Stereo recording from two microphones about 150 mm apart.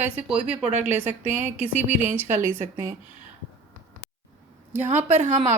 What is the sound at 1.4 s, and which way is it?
A woman's voice, 15° right (ahead or behind).